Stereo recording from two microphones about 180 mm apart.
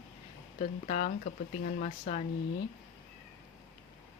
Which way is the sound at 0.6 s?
40° left (ahead or behind).